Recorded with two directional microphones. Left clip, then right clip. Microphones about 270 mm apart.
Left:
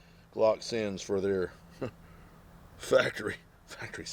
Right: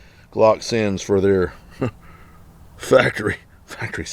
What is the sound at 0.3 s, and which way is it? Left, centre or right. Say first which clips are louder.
Speech: right 12 dB; right.